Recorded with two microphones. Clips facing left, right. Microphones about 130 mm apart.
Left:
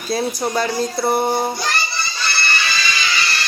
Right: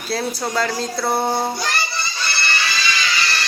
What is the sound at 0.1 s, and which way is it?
A man's voice, 15° left (ahead or behind).